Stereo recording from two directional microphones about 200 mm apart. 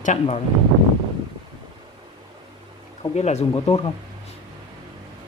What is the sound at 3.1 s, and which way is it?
Speech, 35° left (ahead or behind).